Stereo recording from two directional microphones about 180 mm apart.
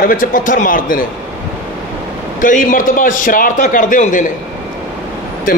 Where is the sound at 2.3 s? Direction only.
45° left (ahead or behind).